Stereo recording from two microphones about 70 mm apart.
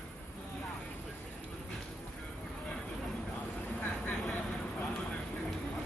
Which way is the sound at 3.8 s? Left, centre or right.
Left.